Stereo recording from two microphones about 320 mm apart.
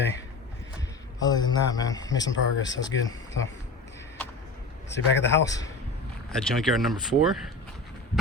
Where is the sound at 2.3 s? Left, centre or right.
Left.